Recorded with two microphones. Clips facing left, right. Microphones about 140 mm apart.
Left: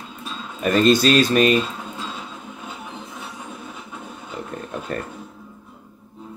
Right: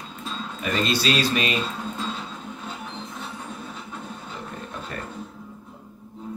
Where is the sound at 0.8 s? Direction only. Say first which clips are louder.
Left 8 dB; 50° left (ahead or behind).